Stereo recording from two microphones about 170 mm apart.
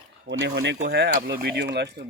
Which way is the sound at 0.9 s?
75° right (ahead or behind).